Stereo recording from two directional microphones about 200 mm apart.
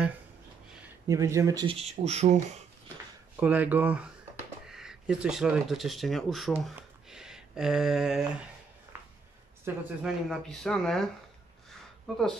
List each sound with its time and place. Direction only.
1.0 s speech: 15° right (ahead or behind)
1.8 s speech: 30° right (ahead or behind)
3.3 s speech: 5° right (ahead or behind)
6.7 s a sound: 5° right (ahead or behind)
9.7 s speech: 10° right (ahead or behind)
10.0 s speech: centre (ahead or behind)
12.1 s speech: centre (ahead or behind)